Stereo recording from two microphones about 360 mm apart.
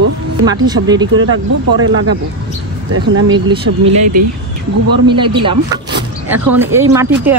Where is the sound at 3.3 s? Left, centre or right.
Centre.